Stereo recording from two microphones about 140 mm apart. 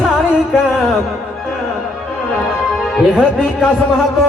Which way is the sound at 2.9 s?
Centre (ahead or behind).